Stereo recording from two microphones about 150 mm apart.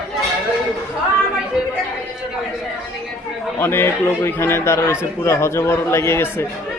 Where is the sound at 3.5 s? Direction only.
15° left (ahead or behind).